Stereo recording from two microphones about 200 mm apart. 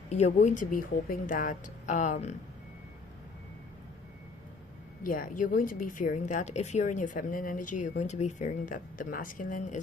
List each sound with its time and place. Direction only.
0.1 s a woman's voice: 35° left (ahead or behind)
5.0 s a woman's voice: 45° left (ahead or behind)